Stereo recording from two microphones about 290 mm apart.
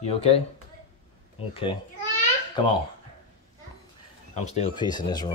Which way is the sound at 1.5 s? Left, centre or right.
Centre.